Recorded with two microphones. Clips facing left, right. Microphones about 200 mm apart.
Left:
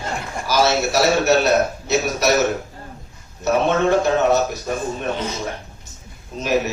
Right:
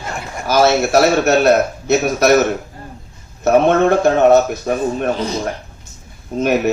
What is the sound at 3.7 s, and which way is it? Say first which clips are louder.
A man's voice: right 4 dB; 55° right (ahead or behind).